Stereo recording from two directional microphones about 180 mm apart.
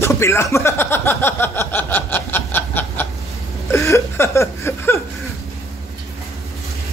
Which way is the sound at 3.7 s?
15° left (ahead or behind).